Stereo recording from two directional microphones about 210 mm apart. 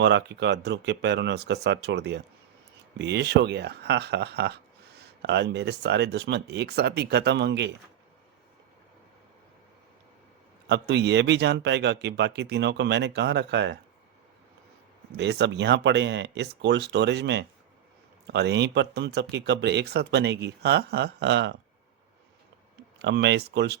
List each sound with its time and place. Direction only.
0.0 s speech: 55° right (ahead or behind)
10.7 s speech: 55° right (ahead or behind)
15.1 s speech: 55° right (ahead or behind)
23.0 s speech: 55° right (ahead or behind)